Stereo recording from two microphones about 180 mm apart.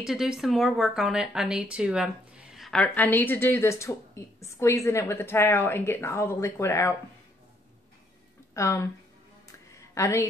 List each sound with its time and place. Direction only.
0.0 s speech: 5° right (ahead or behind); by 7.0 s 15° left (ahead or behind)
8.5 s speech: 15° left (ahead or behind)
9.5 s a sound: 15° left (ahead or behind)